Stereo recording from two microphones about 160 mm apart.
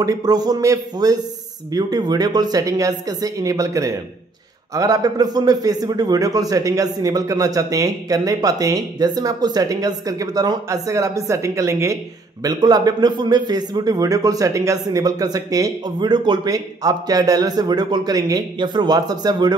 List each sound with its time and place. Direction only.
0.0 s a man's voice: 25° right (ahead or behind)